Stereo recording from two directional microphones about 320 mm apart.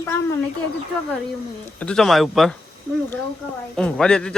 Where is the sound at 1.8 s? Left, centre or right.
Centre.